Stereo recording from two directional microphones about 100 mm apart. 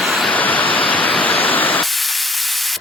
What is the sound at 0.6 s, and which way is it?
Waterfall, 60° left (ahead or behind).